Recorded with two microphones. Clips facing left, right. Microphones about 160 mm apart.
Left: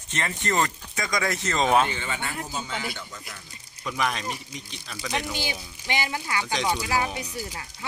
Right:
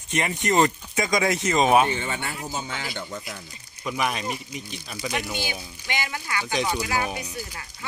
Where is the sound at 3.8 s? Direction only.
5° right (ahead or behind).